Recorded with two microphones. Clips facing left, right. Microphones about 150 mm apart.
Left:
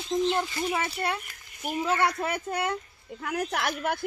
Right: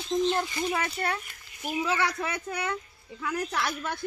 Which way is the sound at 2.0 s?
30° left (ahead or behind).